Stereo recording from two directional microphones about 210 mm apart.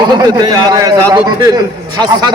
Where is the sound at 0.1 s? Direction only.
20° right (ahead or behind).